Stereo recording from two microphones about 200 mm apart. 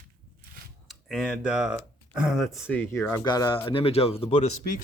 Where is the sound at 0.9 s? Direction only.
Centre (ahead or behind).